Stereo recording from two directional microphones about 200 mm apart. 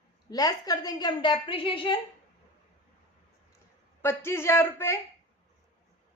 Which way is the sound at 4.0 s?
10° left (ahead or behind).